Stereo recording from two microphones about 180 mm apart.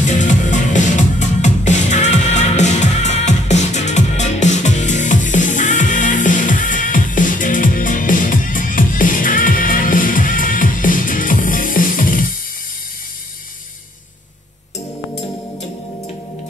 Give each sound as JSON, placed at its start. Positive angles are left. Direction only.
{"t": 0.0, "sound": "music", "side_deg": 45}